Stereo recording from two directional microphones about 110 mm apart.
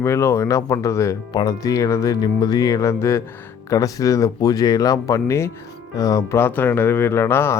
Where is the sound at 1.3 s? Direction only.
35° left (ahead or behind).